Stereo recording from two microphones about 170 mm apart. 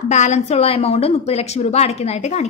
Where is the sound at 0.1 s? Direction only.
40° left (ahead or behind).